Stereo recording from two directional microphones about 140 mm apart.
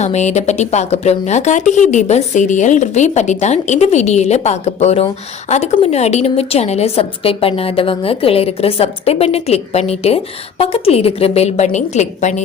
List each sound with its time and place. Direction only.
0.0 s speech: 55° left (ahead or behind)